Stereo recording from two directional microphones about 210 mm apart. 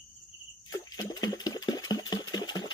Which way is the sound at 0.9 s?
20° left (ahead or behind).